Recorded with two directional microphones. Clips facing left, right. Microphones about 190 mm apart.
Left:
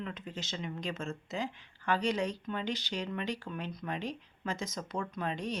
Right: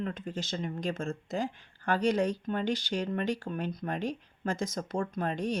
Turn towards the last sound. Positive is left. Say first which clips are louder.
# right 4 dB
turn(degrees=-50)  # may be behind; listen again after turning